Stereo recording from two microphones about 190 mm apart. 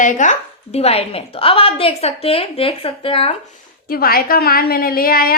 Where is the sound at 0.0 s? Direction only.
40° left (ahead or behind).